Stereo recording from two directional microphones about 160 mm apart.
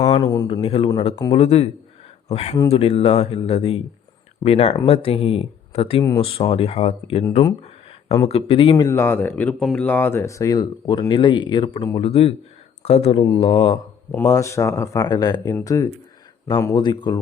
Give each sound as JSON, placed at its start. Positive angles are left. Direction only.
{"t": 0.2, "sound": "speech", "side_deg": 25}
{"t": 0.4, "sound": "speech", "side_deg": 35}
{"t": 6.0, "sound": "speech", "side_deg": 30}
{"t": 8.9, "sound": "speech", "side_deg": 15}
{"t": 13.1, "sound": "speech", "side_deg": 20}
{"t": 13.4, "sound": "speech", "side_deg": 35}
{"t": 14.3, "sound": "speech", "side_deg": 20}